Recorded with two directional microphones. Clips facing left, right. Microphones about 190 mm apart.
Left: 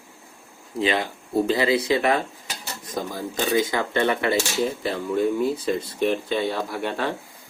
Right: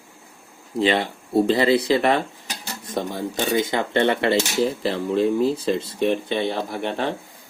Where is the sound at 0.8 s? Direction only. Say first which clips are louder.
Right 3 dB; 30° right (ahead or behind).